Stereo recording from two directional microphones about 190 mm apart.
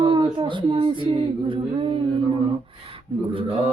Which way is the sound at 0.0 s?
20° right (ahead or behind).